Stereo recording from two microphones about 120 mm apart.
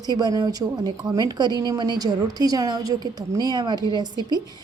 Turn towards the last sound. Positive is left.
turn(degrees=-35)  # may be behind; listen again after turning